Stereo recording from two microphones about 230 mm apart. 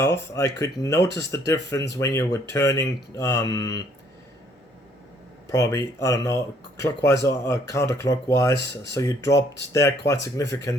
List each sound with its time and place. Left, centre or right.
0.0 s speech: centre
5.5 s speech: centre